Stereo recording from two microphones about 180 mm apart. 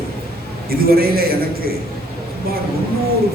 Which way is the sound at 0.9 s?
55° right (ahead or behind).